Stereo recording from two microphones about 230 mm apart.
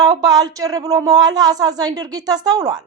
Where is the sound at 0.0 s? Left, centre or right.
Centre.